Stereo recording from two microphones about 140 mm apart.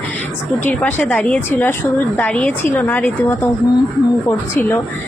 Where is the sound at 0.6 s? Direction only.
10° left (ahead or behind).